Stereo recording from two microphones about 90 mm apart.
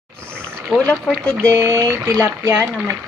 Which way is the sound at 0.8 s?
15° left (ahead or behind).